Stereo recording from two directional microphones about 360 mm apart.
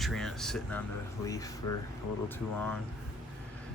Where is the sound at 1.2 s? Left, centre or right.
Centre.